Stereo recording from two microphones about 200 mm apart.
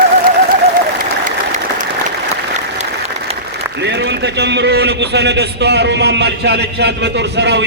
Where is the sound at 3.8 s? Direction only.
60° right (ahead or behind).